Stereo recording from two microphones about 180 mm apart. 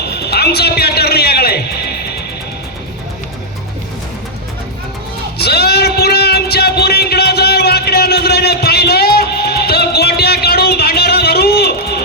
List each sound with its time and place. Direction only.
0.0 s music: 65° left (ahead or behind)
5.4 s music: 65° left (ahead or behind)